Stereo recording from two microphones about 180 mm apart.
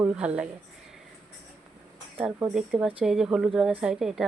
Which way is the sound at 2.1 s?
10° right (ahead or behind).